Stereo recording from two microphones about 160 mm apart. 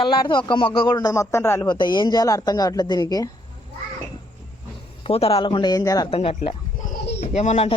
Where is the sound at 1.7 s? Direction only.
30° left (ahead or behind).